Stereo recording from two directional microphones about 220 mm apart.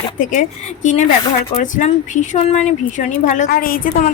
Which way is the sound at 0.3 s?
35° left (ahead or behind).